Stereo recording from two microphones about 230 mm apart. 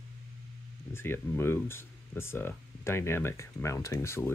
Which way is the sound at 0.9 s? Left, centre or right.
Centre.